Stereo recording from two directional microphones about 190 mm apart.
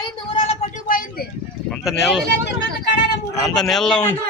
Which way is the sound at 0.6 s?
45° left (ahead or behind).